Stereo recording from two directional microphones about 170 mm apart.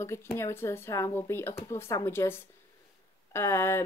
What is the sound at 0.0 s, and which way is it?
Speech, 15° left (ahead or behind).